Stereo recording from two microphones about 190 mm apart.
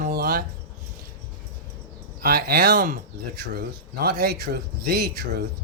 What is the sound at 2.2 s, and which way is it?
Speech, 55° right (ahead or behind).